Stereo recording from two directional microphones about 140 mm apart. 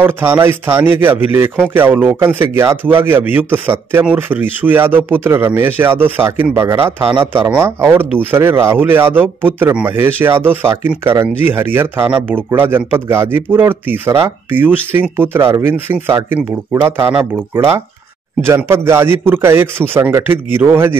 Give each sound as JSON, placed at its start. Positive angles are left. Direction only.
{"t": 0.0, "sound": "speech", "side_deg": -15}